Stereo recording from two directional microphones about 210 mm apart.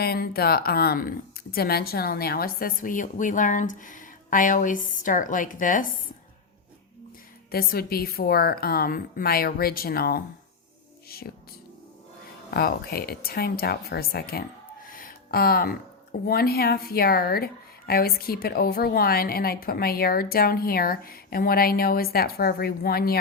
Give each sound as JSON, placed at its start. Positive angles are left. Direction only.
{"t": 0.0, "sound": "speech", "side_deg": 50}
{"t": 7.5, "sound": "speech", "side_deg": 45}
{"t": 12.5, "sound": "speech", "side_deg": 45}
{"t": 14.8, "sound": "a sound", "side_deg": 40}
{"t": 16.2, "sound": "speech", "side_deg": 45}